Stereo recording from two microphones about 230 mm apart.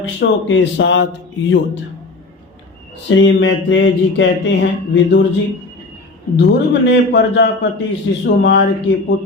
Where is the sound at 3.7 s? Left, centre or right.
Left.